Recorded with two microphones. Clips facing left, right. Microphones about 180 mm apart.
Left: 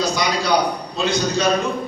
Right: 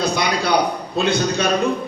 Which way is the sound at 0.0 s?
55° right (ahead or behind).